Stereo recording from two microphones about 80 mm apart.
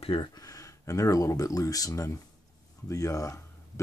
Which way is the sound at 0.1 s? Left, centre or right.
Left.